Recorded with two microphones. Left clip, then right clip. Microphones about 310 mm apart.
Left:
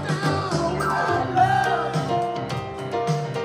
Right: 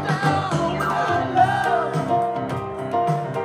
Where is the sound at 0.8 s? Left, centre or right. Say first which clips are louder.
Right 1 dB; right.